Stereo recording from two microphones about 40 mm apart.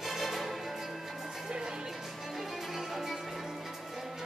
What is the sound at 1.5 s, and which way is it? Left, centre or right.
Music, centre.